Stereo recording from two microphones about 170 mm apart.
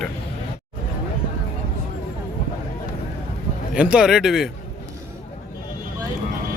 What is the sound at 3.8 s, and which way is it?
Speech, 5° right (ahead or behind).